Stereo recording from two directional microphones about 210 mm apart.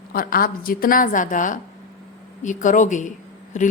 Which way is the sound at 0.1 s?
45° left (ahead or behind).